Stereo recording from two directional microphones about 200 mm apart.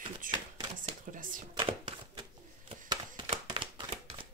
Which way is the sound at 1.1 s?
40° right (ahead or behind).